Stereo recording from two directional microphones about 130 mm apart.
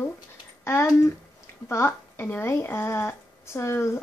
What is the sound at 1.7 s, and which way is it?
A woman's voice, 20° left (ahead or behind).